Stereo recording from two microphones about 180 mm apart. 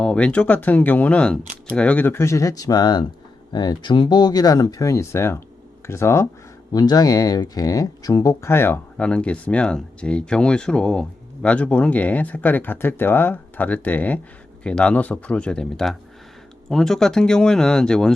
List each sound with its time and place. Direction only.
0.0 s speech: 5° left (ahead or behind)